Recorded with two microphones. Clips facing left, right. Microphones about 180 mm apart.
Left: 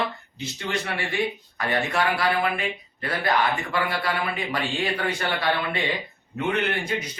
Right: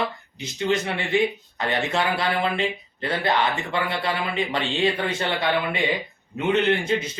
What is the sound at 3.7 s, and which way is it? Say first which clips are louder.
Speech: right 1 dB; 25° right (ahead or behind).